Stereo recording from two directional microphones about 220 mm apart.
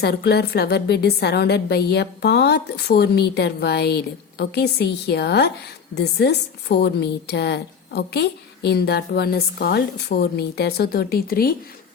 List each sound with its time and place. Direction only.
0.0 s a woman's voice: 50° left (ahead or behind)